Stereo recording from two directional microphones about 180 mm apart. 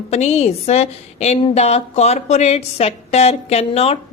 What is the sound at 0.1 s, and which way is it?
A woman's voice, 35° left (ahead or behind).